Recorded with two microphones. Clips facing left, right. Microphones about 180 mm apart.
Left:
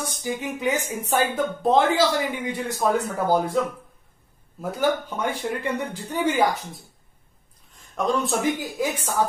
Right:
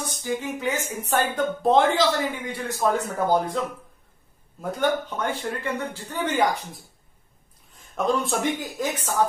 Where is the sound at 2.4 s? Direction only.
15° left (ahead or behind).